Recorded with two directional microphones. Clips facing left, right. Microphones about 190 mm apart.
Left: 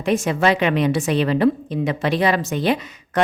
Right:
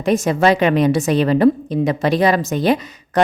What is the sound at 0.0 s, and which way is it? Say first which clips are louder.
A woman's voice: right 3 dB; 40° right (ahead or behind).